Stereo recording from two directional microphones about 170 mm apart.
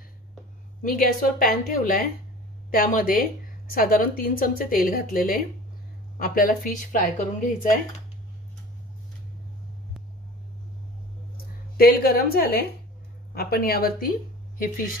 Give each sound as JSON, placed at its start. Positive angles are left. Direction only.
{"t": 0.8, "sound": "a woman's voice", "side_deg": 55}
{"t": 11.7, "sound": "a woman's voice", "side_deg": 60}